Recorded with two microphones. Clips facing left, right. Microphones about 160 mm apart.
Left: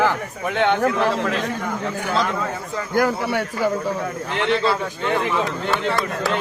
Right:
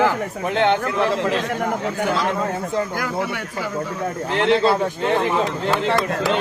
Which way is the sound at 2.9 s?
35° left (ahead or behind).